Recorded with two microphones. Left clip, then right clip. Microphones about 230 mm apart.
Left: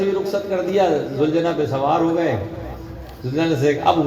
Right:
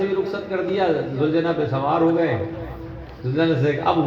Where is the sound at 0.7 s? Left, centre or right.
Left.